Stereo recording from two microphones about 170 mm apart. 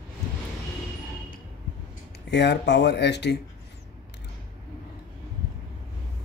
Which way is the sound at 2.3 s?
85° left.